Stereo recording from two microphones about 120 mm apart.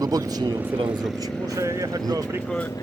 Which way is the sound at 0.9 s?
5° right (ahead or behind).